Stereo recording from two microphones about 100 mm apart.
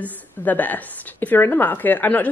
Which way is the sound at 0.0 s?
15° left (ahead or behind).